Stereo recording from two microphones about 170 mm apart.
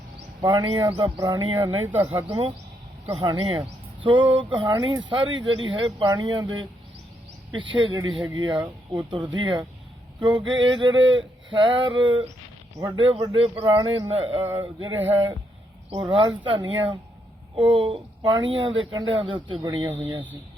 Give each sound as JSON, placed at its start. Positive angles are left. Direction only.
{"t": 0.4, "sound": "speech", "side_deg": -25}
{"t": 1.8, "sound": "speech", "side_deg": -10}
{"t": 3.2, "sound": "speech", "side_deg": -30}
{"t": 7.7, "sound": "speech", "side_deg": -30}
{"t": 16.0, "sound": "speech", "side_deg": -30}
{"t": 18.3, "sound": "speech", "side_deg": -90}
{"t": 18.6, "sound": "speech", "side_deg": -30}